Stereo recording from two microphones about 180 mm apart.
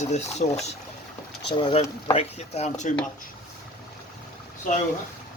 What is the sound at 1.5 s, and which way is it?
Speech, 30° left (ahead or behind).